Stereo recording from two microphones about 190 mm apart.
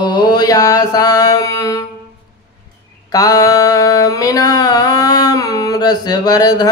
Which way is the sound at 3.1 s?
20° left (ahead or behind).